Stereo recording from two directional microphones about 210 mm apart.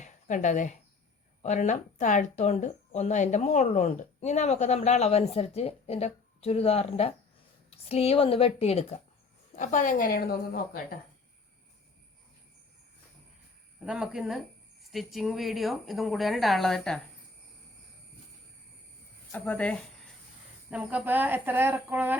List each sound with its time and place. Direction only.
0.0 s a woman's voice: 35° left (ahead or behind)
13.8 s a woman's voice: 5° right (ahead or behind)
19.3 s a woman's voice: 5° left (ahead or behind)
20.7 s speech: 5° right (ahead or behind)